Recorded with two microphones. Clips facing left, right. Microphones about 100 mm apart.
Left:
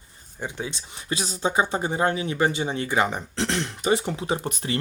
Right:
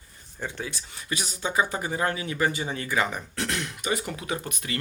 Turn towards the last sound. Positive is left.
turn(degrees=30)  # may be behind; listen again after turning